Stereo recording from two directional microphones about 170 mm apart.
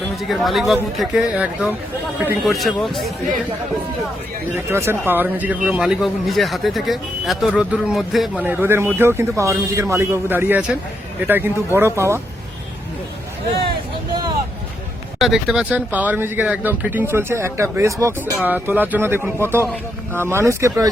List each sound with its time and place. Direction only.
0.2 s speech: centre (ahead or behind)
4.5 s speech: 15° right (ahead or behind)
8.4 s speech: 10° right (ahead or behind)
15.2 s speech: centre (ahead or behind)